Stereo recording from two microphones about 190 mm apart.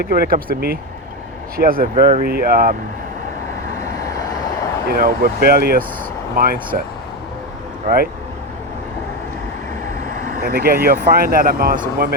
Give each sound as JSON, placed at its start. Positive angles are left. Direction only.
{"t": 0.0, "sound": "speech", "side_deg": -50}
{"t": 3.8, "sound": "vehicle", "side_deg": 15}
{"t": 4.9, "sound": "speech", "side_deg": -55}
{"t": 7.9, "sound": "speech", "side_deg": -50}
{"t": 10.3, "sound": "speech", "side_deg": -50}